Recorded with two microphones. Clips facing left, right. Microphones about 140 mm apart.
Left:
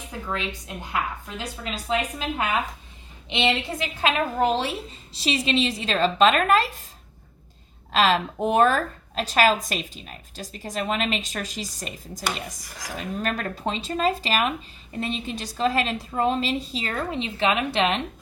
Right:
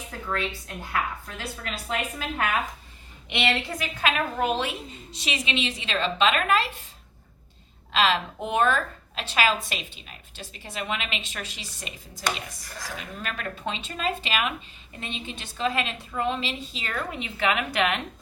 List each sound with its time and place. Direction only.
0.1 s a woman's voice: 15° left (ahead or behind); by 6.8 s 40° left (ahead or behind)
7.9 s a woman's voice: 40° left (ahead or behind)
12.6 s speech: 15° left (ahead or behind)
13.0 s a woman's voice: 45° left (ahead or behind); by 18.0 s 30° left (ahead or behind)